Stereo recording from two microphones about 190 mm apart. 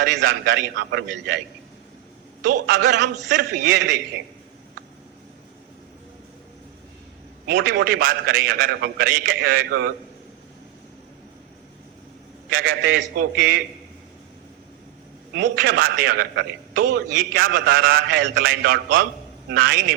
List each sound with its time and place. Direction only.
0.0 s a man's voice: 65° right (ahead or behind)
2.4 s a man's voice: 50° right (ahead or behind)
7.4 s a man's voice: 50° right (ahead or behind)
12.5 s a man's voice: 50° right (ahead or behind)
15.4 s a man's voice: 55° right (ahead or behind)